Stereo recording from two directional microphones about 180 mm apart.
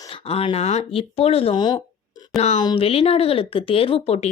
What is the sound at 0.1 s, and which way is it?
Speech, 30° left (ahead or behind).